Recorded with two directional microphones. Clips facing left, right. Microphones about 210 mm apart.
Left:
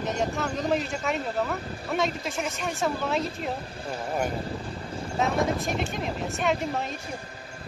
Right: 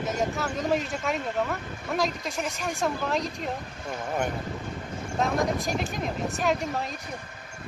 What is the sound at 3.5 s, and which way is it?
Speech, 35° left (ahead or behind).